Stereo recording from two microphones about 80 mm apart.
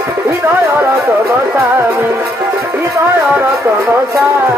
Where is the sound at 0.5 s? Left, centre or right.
Right.